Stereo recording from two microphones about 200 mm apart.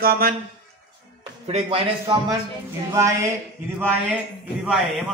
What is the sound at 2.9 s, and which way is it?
Speech, 15° right (ahead or behind).